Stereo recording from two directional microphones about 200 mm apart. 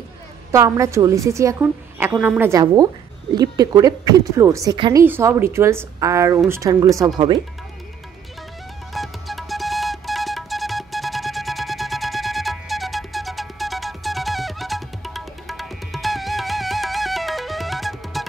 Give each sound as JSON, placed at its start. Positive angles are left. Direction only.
{"t": 0.5, "sound": "a woman's voice", "side_deg": -15}
{"t": 5.0, "sound": "a woman's voice", "side_deg": -10}
{"t": 8.9, "sound": "music", "side_deg": 0}